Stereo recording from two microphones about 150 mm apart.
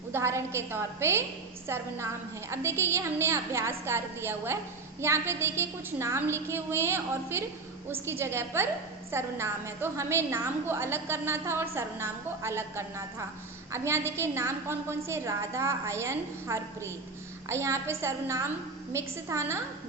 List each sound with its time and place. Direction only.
0.1 s a woman's voice: 20° right (ahead or behind)